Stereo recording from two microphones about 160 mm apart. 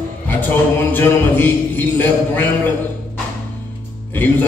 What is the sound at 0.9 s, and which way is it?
A man's voice, 10° left (ahead or behind).